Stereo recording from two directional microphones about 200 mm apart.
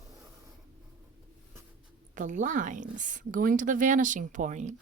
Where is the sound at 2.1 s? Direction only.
40° right (ahead or behind).